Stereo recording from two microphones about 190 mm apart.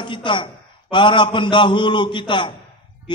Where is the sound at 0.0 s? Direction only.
25° left (ahead or behind).